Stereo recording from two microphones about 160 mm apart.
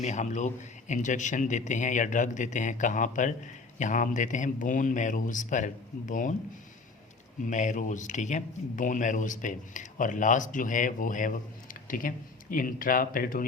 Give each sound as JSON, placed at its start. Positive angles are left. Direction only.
{"t": 0.0, "sound": "a man's voice", "side_deg": 45}
{"t": 7.4, "sound": "a man's voice", "side_deg": 50}